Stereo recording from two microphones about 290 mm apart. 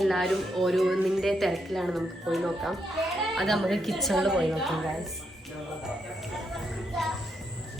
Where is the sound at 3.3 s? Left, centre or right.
Centre.